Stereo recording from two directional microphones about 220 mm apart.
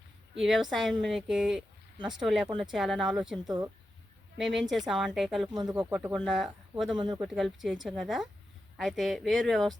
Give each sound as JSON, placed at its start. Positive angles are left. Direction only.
{"t": 0.3, "sound": "speech", "side_deg": 0}
{"t": 3.4, "sound": "speech", "side_deg": -20}
{"t": 4.4, "sound": "a woman's voice", "side_deg": 0}
{"t": 6.9, "sound": "speech", "side_deg": -20}
{"t": 7.2, "sound": "speech", "side_deg": 0}